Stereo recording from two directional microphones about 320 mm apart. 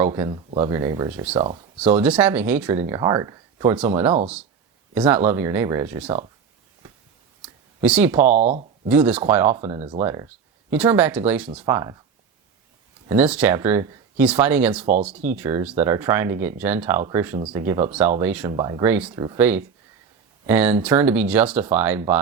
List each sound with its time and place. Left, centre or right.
0.0 s speech: centre
1.8 s speech: centre
7.4 s a sound: centre
8.3 s speech: right
8.9 s speech: centre
9.6 s speech: centre
13.1 s speech: centre
14.8 s speech: right
15.1 s speech: centre